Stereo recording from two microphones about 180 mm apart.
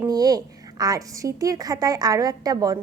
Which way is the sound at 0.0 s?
20° right (ahead or behind).